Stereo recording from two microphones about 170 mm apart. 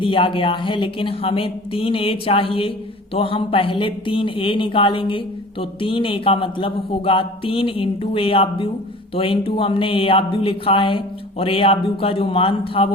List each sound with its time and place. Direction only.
0.0 s speech: 30° left (ahead or behind)